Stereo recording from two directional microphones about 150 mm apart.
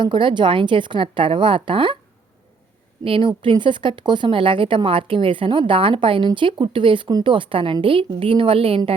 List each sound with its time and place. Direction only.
0.0 s a woman's voice: 30° right (ahead or behind)
3.0 s a woman's voice: 35° right (ahead or behind)